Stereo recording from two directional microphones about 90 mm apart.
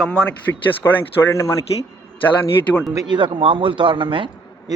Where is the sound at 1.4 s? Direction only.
35° left (ahead or behind).